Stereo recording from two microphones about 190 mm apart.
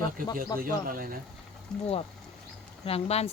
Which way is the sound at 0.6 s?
50° right (ahead or behind).